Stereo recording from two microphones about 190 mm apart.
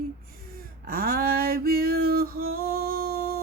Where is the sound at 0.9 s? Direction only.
50° right (ahead or behind).